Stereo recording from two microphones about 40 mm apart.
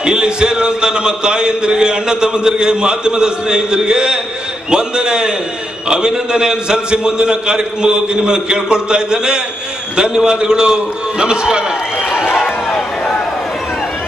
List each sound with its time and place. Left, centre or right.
0.0 s a man's voice: centre